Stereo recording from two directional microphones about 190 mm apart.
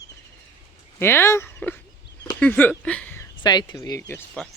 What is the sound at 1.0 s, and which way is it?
Speech, 10° left (ahead or behind).